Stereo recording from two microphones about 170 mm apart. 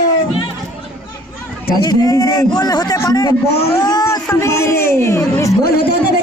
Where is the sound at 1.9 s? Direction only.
20° left (ahead or behind).